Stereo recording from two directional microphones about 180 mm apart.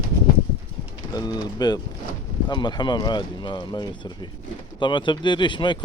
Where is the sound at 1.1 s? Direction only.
20° left (ahead or behind).